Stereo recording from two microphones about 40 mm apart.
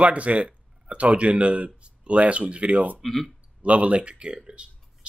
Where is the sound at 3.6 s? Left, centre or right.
Right.